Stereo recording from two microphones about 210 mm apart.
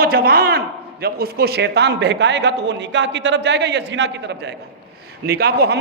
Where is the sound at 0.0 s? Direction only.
45° right (ahead or behind).